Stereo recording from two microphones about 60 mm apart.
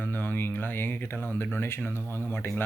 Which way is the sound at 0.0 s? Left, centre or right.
Left.